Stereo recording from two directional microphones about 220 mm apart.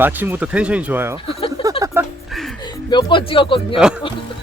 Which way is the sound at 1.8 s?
10° right (ahead or behind).